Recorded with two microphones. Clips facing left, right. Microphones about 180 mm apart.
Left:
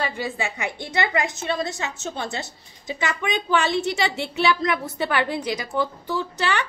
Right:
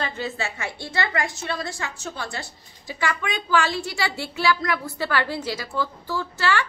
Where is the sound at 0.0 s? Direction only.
15° left (ahead or behind).